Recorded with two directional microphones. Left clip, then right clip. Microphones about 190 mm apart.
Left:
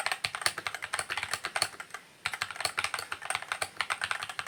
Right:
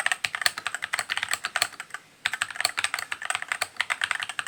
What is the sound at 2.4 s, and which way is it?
Typing, 30° right (ahead or behind).